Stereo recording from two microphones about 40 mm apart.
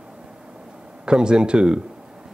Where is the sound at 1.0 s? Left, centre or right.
Centre.